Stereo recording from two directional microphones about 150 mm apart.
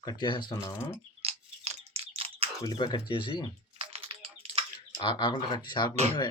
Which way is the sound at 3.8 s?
40° right (ahead or behind).